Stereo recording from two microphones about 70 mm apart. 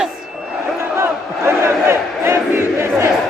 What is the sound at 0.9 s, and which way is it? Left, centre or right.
Crowd, right.